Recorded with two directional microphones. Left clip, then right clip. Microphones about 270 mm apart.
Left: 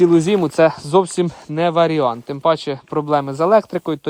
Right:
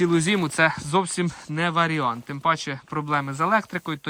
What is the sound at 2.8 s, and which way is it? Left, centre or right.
Speech, right.